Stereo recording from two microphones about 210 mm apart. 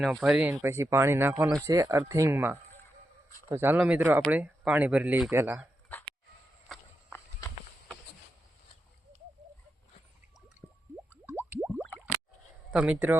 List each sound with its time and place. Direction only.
0.0 s speech: centre (ahead or behind)
7.1 s horse: 10° left (ahead or behind)
11.3 s plop: 10° right (ahead or behind)
12.7 s speech: 5° right (ahead or behind)